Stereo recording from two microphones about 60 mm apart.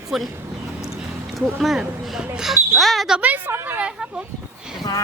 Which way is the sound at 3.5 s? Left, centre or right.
Right.